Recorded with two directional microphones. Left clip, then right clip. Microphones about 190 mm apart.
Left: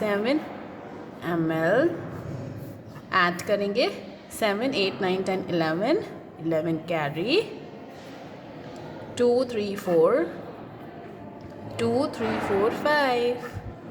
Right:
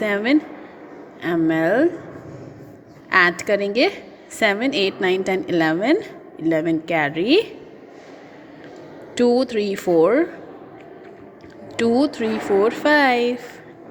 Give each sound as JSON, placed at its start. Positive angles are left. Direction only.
{"t": 0.0, "sound": "a woman's voice", "side_deg": -25}
{"t": 3.1, "sound": "a woman's voice", "side_deg": -30}
{"t": 9.1, "sound": "a woman's voice", "side_deg": -25}
{"t": 11.8, "sound": "a woman's voice", "side_deg": -25}